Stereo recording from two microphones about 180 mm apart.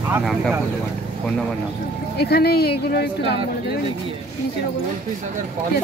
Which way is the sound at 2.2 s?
65° left (ahead or behind).